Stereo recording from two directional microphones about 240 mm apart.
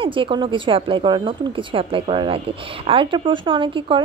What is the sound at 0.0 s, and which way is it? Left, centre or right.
Speech, right.